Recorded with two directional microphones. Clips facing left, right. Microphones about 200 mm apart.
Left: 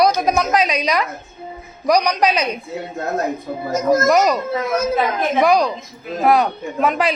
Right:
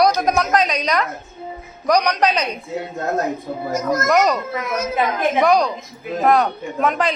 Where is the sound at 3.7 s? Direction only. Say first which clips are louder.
Left 5 dB; 25° left (ahead or behind).